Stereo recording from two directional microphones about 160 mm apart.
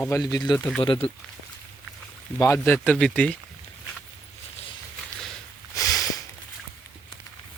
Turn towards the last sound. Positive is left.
turn(degrees=20)  # may be behind; listen again after turning